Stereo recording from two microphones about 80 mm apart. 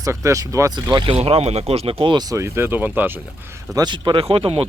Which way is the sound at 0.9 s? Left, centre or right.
Right.